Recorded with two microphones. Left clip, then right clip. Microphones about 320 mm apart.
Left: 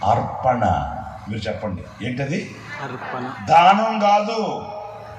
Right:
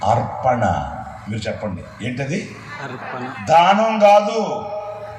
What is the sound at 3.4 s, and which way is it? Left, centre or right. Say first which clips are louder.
Speech: even; right.